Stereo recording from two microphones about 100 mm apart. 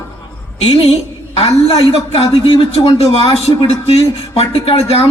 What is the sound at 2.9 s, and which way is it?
A man's voice, 80° left.